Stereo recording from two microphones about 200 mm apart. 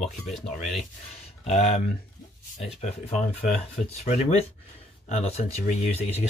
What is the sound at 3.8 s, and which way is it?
Speech, 35° left (ahead or behind).